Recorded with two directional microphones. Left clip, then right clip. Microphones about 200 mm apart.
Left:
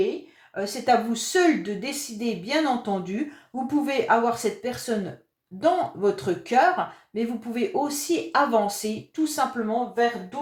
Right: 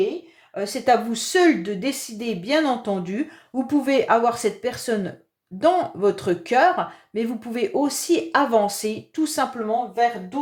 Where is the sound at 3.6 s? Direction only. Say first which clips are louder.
Right 3 dB; 40° right (ahead or behind).